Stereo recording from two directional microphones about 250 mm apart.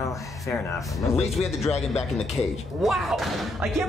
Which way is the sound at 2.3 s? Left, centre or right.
Centre.